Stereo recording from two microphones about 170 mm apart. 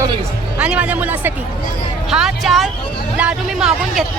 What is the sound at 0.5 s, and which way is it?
Speech, 5° right (ahead or behind).